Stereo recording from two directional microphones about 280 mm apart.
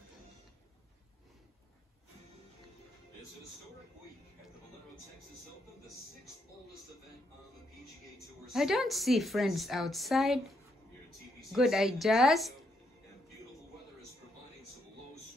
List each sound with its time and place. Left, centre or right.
8.5 s a woman's voice: centre